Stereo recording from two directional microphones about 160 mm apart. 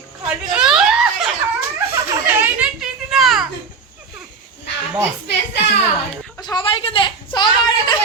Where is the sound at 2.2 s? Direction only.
10° right (ahead or behind).